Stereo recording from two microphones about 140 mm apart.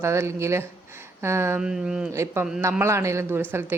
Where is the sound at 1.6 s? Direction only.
5° right (ahead or behind).